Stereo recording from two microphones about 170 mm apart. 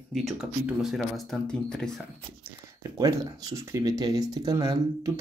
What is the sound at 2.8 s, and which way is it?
Speech, 20° right (ahead or behind).